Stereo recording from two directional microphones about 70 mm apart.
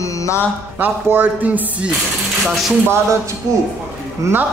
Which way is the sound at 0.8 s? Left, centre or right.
Right.